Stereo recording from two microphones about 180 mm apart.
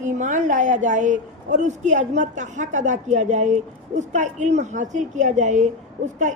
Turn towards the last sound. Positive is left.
turn(degrees=-45)  # may be behind; listen again after turning